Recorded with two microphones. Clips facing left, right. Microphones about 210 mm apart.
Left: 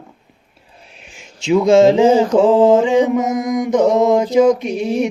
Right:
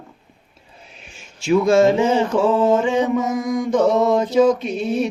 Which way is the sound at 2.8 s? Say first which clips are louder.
Left 4 dB; 15° left (ahead or behind).